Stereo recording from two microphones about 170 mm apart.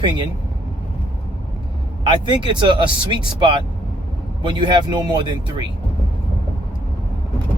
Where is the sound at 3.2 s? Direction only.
30° right (ahead or behind).